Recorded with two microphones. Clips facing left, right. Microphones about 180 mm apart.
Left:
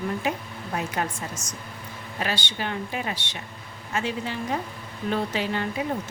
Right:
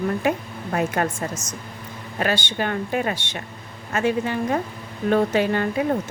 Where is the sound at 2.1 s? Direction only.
50° right (ahead or behind).